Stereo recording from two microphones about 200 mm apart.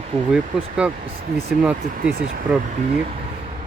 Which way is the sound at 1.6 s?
5° right (ahead or behind).